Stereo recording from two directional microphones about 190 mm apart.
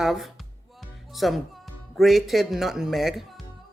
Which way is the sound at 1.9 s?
Centre (ahead or behind).